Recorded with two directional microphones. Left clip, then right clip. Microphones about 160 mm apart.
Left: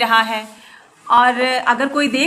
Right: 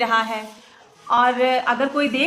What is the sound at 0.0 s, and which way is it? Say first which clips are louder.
A woman's voice: left 5 dB; 15° left (ahead or behind).